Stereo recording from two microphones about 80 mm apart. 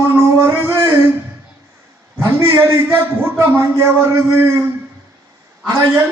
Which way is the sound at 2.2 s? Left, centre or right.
Right.